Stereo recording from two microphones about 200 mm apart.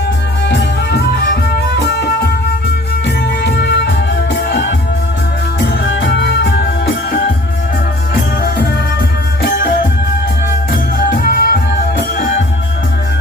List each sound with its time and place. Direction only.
0.4 s music: 55° left (ahead or behind)
3.2 s music: 55° left (ahead or behind)
8.1 s music: 50° left (ahead or behind)
10.7 s music: 50° left (ahead or behind)